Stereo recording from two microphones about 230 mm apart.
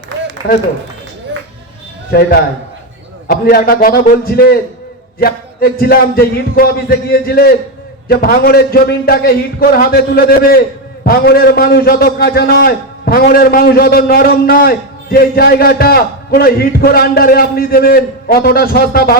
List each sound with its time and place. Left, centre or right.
2.0 s a man's voice: left